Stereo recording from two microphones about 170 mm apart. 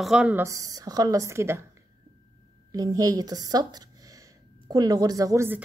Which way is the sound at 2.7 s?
20° right (ahead or behind).